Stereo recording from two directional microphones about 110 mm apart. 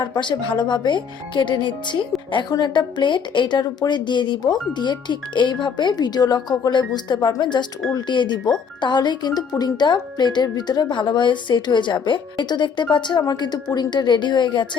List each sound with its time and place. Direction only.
0.2 s speech: 45° left (ahead or behind)